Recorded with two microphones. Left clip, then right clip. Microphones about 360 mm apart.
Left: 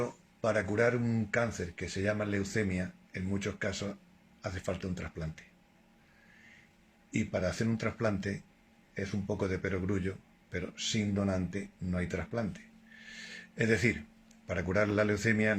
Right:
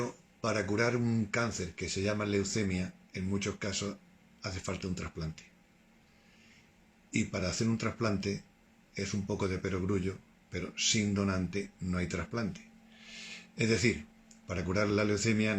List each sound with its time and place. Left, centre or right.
0.4 s speech: centre
7.1 s speech: centre